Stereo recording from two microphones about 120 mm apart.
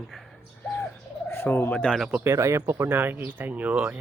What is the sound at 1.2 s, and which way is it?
Fowl, 20° left (ahead or behind).